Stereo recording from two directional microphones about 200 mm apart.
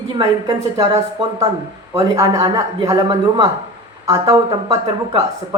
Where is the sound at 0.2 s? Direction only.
20° right (ahead or behind).